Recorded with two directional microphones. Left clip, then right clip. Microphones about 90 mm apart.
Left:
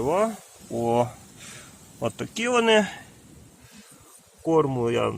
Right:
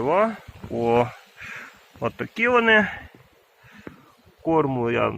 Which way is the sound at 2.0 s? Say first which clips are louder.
Right 4 dB; 35° left (ahead or behind).